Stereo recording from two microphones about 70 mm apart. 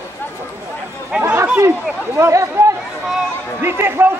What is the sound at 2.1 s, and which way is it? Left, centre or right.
Speech, right.